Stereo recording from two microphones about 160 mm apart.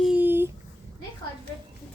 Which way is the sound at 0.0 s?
10° right (ahead or behind).